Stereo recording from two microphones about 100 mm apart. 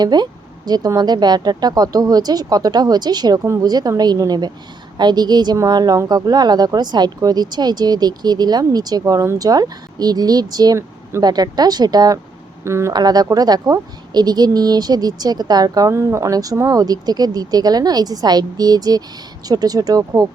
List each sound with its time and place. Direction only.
0.0 s speech: 45° right (ahead or behind)
12.6 s speech: 30° right (ahead or behind)
12.9 s speech: 45° right (ahead or behind)